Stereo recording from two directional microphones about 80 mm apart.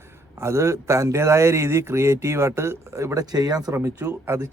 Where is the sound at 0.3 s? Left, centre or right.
Right.